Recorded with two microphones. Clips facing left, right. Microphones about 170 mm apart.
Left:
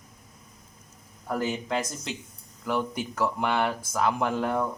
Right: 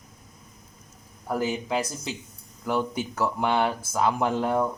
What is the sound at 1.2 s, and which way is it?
Speech, 10° right (ahead or behind).